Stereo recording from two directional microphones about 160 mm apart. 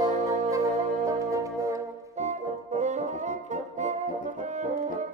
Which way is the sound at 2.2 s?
45° right (ahead or behind).